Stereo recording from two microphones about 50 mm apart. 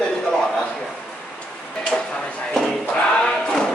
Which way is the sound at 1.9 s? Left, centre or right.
Centre.